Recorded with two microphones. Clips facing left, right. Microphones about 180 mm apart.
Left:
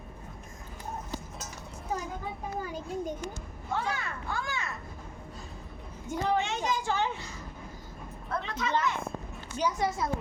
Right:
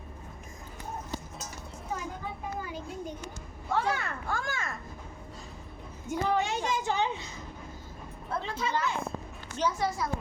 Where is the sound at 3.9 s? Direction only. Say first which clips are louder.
Right 2 dB; 45° right (ahead or behind).